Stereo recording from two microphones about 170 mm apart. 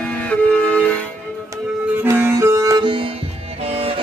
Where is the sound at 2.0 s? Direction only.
15° right (ahead or behind).